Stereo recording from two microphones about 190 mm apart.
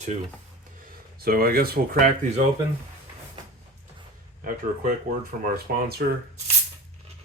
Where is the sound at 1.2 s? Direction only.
50° right (ahead or behind).